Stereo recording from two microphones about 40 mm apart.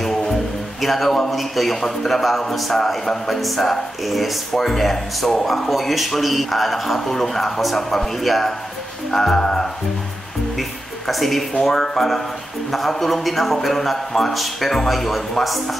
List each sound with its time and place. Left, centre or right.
0.0 s music: centre
0.7 s a man's voice: centre
5.7 s a man's voice: centre
11.1 s a man's voice: centre